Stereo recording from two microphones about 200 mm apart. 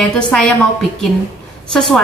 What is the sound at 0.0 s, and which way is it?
Speech, 5° left (ahead or behind).